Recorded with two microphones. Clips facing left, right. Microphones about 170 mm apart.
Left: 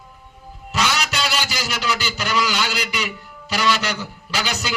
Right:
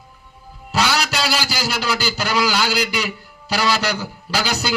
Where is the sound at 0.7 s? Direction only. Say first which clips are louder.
Right 3 dB; 35° right (ahead or behind).